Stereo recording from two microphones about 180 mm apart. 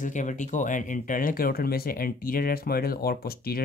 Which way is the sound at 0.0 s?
45° left (ahead or behind).